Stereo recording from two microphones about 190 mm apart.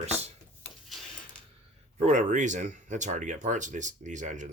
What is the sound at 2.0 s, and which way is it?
Speech, 40° right (ahead or behind).